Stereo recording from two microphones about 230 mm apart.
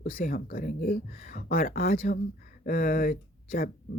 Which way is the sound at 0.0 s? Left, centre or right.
Left.